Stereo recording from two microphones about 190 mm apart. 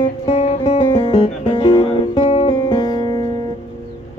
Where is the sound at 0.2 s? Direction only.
35° left (ahead or behind).